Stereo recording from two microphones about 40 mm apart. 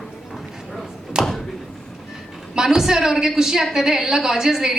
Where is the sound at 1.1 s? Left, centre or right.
Centre.